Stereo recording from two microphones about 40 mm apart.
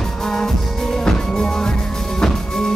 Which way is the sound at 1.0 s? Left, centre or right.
Centre.